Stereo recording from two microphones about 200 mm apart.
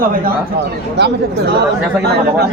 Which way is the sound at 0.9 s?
60° right (ahead or behind).